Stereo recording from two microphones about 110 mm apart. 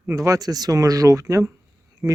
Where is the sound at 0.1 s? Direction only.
30° right (ahead or behind).